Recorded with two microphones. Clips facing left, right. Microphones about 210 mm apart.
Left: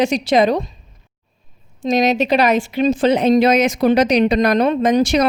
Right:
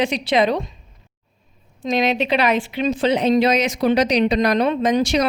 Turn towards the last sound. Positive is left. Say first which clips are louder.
# left 3 dB
turn(degrees=50)  # may be behind; listen again after turning